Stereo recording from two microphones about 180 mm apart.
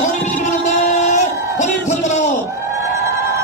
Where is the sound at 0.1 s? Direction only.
45° left (ahead or behind).